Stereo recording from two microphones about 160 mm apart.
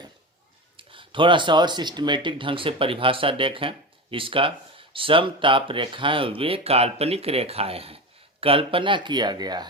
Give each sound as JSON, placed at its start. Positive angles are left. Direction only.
{"t": 0.8, "sound": "speech", "side_deg": -35}